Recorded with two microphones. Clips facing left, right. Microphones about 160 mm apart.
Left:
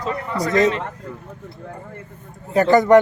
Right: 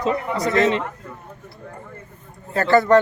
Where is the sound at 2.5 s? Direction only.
15° left (ahead or behind).